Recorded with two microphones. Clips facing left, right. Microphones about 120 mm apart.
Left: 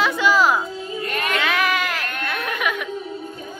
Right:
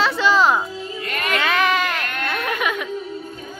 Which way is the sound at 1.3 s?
Centre (ahead or behind).